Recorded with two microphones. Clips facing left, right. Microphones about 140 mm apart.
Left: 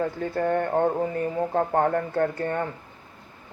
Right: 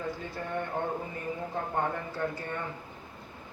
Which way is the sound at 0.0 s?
55° left (ahead or behind).